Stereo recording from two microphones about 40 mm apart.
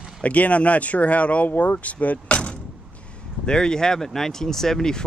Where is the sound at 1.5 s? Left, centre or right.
Left.